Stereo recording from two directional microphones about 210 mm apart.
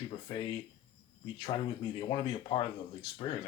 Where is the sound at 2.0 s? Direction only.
25° left (ahead or behind).